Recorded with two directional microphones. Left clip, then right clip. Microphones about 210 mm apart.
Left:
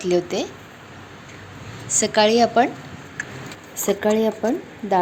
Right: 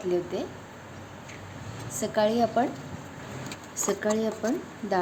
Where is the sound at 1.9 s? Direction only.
15° left (ahead or behind).